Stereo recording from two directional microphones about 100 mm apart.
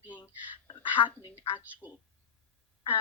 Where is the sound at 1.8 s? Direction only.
20° right (ahead or behind).